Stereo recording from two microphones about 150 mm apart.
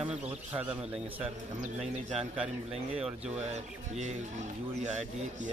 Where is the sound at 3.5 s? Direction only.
50° right (ahead or behind).